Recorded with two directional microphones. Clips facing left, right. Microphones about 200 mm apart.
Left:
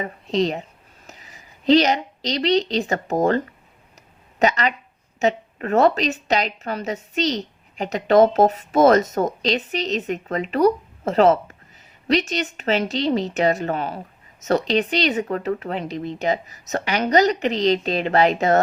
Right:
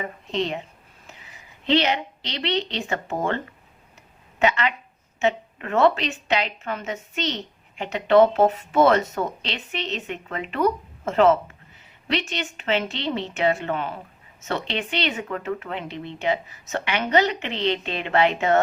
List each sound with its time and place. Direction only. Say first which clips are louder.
0.0 s a woman's voice: left 5 dB; 35° left (ahead or behind)